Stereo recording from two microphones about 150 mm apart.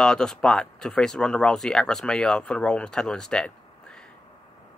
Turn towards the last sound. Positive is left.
turn(degrees=5)  # may be behind; listen again after turning